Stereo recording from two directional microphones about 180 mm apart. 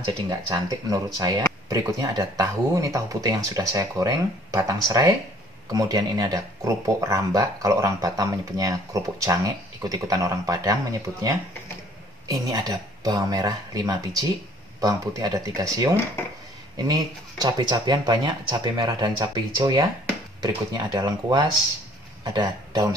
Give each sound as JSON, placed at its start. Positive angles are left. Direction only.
{"t": 0.0, "sound": "speech", "side_deg": -20}
{"t": 12.3, "sound": "speech", "side_deg": -20}